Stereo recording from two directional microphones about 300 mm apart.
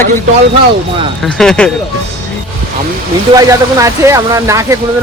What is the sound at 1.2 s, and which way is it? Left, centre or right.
Speech, centre.